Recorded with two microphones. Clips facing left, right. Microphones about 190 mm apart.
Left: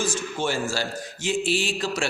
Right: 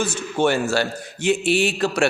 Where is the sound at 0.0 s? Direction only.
65° right (ahead or behind).